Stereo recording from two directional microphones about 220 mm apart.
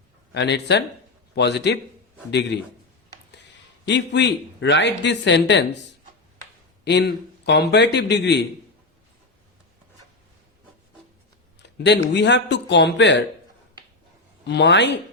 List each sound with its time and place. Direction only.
0.3 s speech: 50° left (ahead or behind)
3.8 s speech: 55° left (ahead or behind)
6.8 s speech: 50° left (ahead or behind)
11.6 s speech: 50° left (ahead or behind)
14.4 s speech: 50° left (ahead or behind)